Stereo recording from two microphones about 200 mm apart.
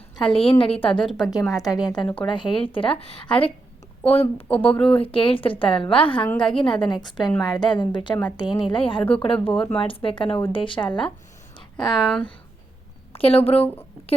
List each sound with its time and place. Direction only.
0.2 s a woman's voice: 25° left (ahead or behind)
4.4 s speech: 5° left (ahead or behind)
4.9 s a woman's voice: 25° left (ahead or behind)
6.2 s speech: 5° left (ahead or behind)
6.9 s a woman's voice: 20° left (ahead or behind)
7.3 s speech: centre (ahead or behind)
7.6 s a woman's voice: 25° left (ahead or behind)
9.5 s speech: 5° left (ahead or behind)
9.8 s a woman's voice: 25° left (ahead or behind)
11.8 s speech: centre (ahead or behind)
13.1 s a woman's voice: 30° left (ahead or behind)